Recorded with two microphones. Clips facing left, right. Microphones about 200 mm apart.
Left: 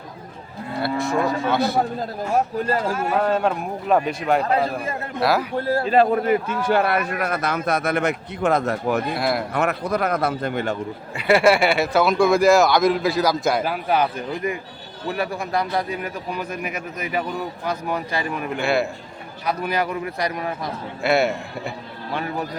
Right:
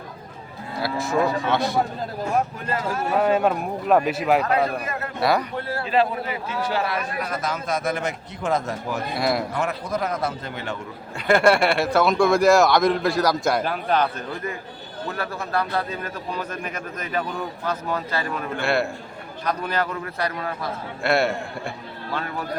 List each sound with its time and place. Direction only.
0.8 s speech: centre (ahead or behind)
3.2 s speech: 5° right (ahead or behind)
5.6 s a man's voice: 40° left (ahead or behind); by 9.0 s 60° left (ahead or behind)
9.1 s speech: centre (ahead or behind)
9.5 s a man's voice: 60° left (ahead or behind)
11.1 s a man's voice: 5° left (ahead or behind)
18.6 s speech: centre (ahead or behind)
19.5 s a man's voice: 10° left (ahead or behind)
21.0 s speech: centre (ahead or behind)
22.1 s a man's voice: 15° left (ahead or behind)